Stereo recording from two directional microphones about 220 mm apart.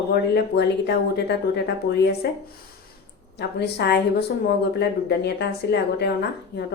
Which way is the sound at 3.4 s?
50° left (ahead or behind).